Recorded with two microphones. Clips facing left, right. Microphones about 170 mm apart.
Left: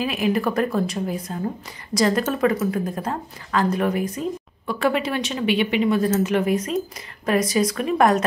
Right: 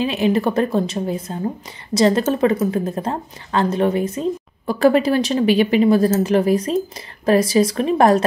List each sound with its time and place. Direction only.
0.0 s speech: 25° right (ahead or behind)